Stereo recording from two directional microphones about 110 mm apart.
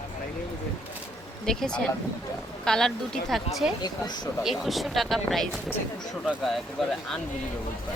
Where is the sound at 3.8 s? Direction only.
40° left (ahead or behind).